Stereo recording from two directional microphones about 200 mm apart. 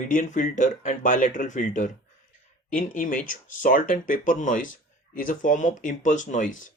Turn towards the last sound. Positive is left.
turn(degrees=40)  # may be behind; listen again after turning